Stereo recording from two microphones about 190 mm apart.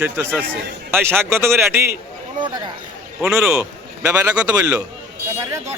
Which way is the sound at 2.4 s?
25° right (ahead or behind).